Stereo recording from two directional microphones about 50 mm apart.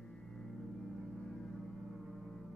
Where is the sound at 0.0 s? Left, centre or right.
Centre.